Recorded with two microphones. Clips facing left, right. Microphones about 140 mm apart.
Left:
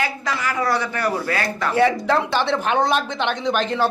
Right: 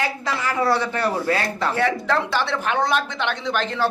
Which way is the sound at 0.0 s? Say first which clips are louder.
Even; 25° right (ahead or behind).